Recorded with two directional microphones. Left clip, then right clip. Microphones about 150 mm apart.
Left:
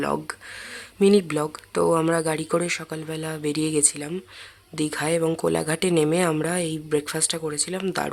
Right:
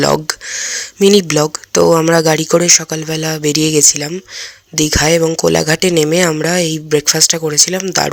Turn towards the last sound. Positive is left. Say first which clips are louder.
# right 14 dB
turn(degrees=-35)  # may be behind; listen again after turning